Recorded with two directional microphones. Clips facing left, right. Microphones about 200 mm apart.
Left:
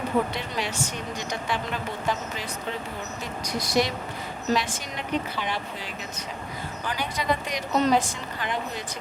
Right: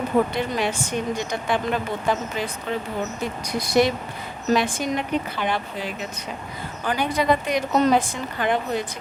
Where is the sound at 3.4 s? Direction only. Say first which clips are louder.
Right 5 dB; 55° right (ahead or behind).